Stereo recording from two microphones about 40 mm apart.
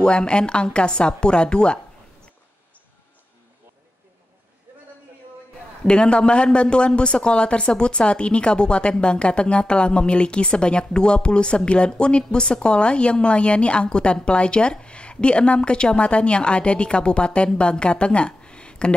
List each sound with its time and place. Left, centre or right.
0.0 s speech: left
5.9 s a woman's voice: left